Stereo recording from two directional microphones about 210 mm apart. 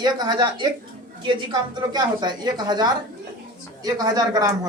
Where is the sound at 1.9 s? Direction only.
20° right (ahead or behind).